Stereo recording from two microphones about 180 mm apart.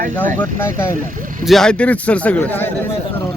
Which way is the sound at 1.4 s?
Centre (ahead or behind).